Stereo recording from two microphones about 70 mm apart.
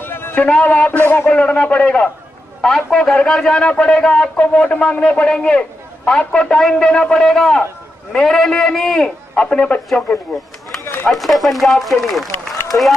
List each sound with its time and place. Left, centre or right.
0.0 s a man's voice: left
1.3 s a man's voice: centre
10.8 s run: left
11.1 s speech: centre
12.7 s speech: left